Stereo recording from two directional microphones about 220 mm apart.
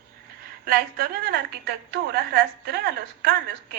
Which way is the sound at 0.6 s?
45° right (ahead or behind).